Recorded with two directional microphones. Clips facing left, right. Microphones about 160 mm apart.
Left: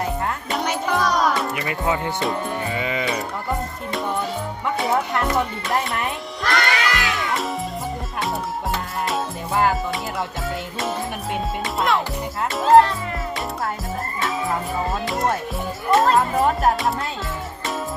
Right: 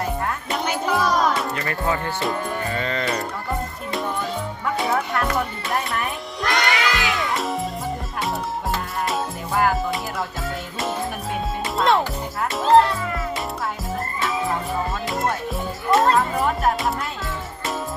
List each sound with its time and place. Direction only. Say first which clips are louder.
0.5 s music: even; centre (ahead or behind)
1.5 s speech: left 1 dB; 15° left (ahead or behind)
2.3 s music: even; 10° left (ahead or behind)
4.9 s music: left 2 dB; 20° left (ahead or behind)
6.5 s crowd: even; 20° right (ahead or behind)
7.2 s music: even; centre (ahead or behind)
12.5 s music: left 2 dB; centre (ahead or behind)
14.2 s music: left 1 dB; centre (ahead or behind)